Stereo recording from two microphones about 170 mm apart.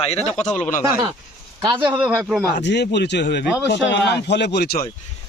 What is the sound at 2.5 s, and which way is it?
Speech, 85° left.